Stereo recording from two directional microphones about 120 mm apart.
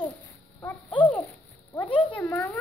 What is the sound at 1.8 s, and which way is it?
Speech, 15° left (ahead or behind).